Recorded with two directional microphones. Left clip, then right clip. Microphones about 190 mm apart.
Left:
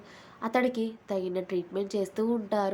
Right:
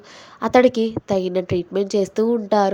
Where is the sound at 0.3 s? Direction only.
40° right (ahead or behind).